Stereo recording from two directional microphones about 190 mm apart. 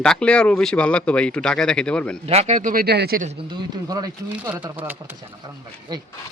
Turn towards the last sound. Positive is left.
turn(degrees=-20)  # may be behind; listen again after turning